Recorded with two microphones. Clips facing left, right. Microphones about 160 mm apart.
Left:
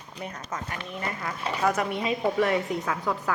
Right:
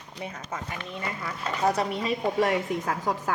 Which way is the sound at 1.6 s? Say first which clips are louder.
Right 1 dB; 35° right (ahead or behind).